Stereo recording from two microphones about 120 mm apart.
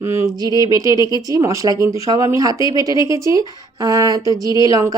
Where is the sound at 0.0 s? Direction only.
20° right (ahead or behind).